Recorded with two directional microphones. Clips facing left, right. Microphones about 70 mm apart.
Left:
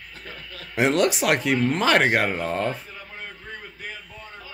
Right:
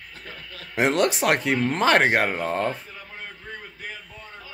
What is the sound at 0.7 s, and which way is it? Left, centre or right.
Speech, right.